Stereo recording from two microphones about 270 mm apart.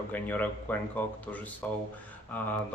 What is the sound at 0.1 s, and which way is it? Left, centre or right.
Speech, centre.